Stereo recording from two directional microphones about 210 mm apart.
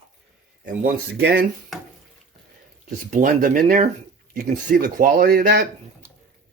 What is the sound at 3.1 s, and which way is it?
Speech, 40° right (ahead or behind).